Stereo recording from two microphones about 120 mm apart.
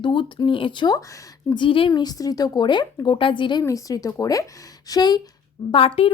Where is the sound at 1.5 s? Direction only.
45° left (ahead or behind).